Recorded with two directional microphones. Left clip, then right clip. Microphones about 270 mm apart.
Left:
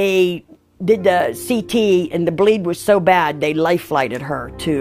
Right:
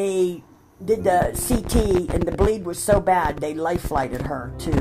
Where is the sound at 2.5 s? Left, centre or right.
Left.